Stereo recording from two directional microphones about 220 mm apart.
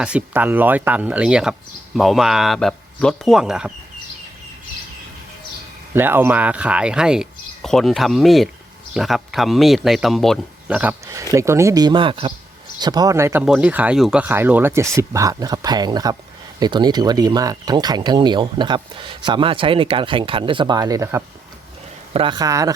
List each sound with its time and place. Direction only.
0.0 s speech: 5° right (ahead or behind)
5.9 s speech: 10° right (ahead or behind)